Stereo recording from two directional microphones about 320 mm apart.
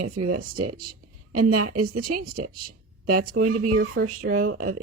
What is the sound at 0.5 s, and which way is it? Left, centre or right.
Speech, right.